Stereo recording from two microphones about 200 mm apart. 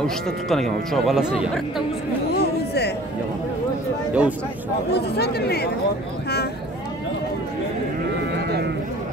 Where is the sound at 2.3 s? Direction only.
55° left (ahead or behind).